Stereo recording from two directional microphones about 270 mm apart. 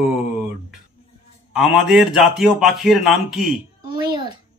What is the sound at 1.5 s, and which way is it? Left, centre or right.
Speech, centre.